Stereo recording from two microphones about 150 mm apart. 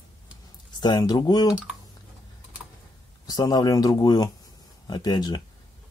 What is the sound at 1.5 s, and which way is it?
Speech, centre (ahead or behind).